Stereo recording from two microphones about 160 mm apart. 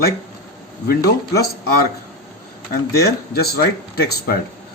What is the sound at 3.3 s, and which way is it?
Speech, 75° left (ahead or behind).